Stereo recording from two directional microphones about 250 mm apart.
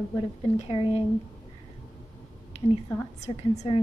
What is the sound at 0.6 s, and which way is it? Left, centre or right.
Speech, left.